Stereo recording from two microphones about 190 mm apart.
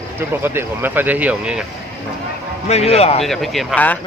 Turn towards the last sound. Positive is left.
turn(degrees=5)  # may be behind; listen again after turning